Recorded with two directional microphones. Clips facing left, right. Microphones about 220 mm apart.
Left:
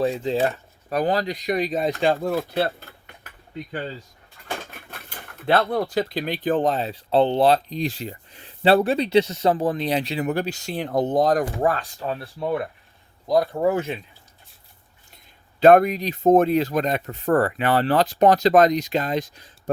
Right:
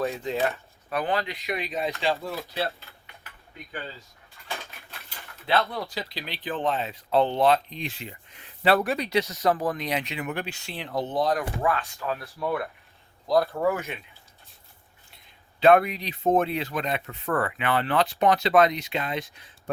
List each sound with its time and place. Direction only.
0.0 s speech: 30° left (ahead or behind); by 2.1 s 45° left (ahead or behind)
2.2 s cutlery: 50° left (ahead or behind)
4.4 s speech: 45° left (ahead or behind)
11.9 s speech: 30° left (ahead or behind)
13.7 s speech: 30° left (ahead or behind)
15.6 s speech: 45° left (ahead or behind)